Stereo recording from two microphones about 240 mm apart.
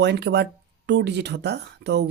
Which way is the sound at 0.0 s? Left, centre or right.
Right.